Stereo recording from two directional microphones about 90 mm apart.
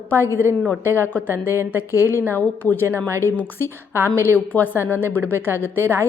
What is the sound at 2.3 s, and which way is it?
Speech, 20° left (ahead or behind).